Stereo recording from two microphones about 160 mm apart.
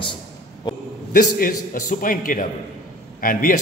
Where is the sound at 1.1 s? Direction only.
60° left (ahead or behind).